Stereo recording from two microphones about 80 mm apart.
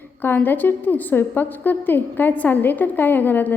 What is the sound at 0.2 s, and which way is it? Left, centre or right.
A woman's voice, left.